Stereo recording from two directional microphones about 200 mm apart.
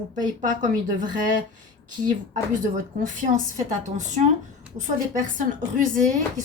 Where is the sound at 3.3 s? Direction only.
40° right (ahead or behind).